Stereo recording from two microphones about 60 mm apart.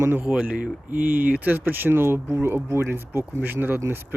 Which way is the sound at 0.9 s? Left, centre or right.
Right.